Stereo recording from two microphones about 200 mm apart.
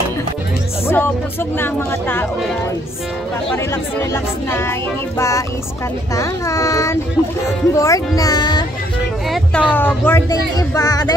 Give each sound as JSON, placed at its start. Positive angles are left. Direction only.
{"t": 0.8, "sound": "speech", "side_deg": 10}
{"t": 4.1, "sound": "speech", "side_deg": 10}
{"t": 6.1, "sound": "speech", "side_deg": 15}
{"t": 9.3, "sound": "speech", "side_deg": 5}